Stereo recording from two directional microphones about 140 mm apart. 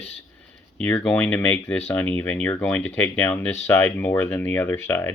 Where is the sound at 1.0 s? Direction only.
5° left (ahead or behind).